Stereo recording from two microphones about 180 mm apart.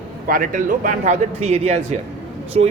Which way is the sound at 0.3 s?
50° right (ahead or behind).